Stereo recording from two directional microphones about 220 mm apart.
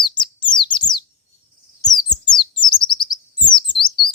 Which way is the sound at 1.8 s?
20° left (ahead or behind).